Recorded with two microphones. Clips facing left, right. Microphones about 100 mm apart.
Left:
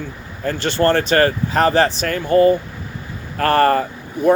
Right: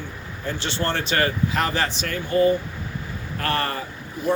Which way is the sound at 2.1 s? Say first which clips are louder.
Left 3 dB; 50° left (ahead or behind).